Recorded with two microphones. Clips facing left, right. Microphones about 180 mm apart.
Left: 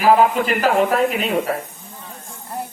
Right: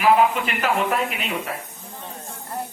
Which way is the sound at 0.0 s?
40° left (ahead or behind).